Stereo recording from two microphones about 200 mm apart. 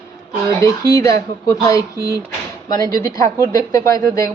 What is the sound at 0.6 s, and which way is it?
Speech, 15° left (ahead or behind).